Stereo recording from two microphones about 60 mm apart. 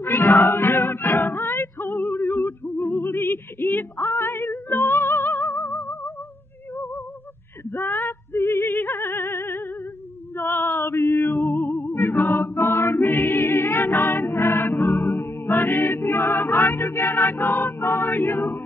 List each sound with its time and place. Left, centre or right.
0.0 s a sound: left
6.7 s music: left
7.7 s female singing: left
10.3 s music: left